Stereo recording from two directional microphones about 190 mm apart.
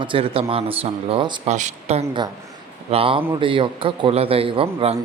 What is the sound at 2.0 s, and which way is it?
A man's voice, 20° right (ahead or behind).